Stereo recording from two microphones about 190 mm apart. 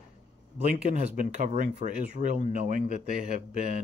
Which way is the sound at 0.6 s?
40° right (ahead or behind).